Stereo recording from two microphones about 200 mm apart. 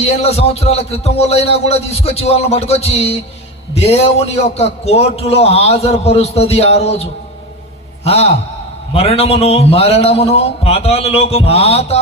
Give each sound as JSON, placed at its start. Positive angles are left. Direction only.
{"t": 0.0, "sound": "a man's voice", "side_deg": 30}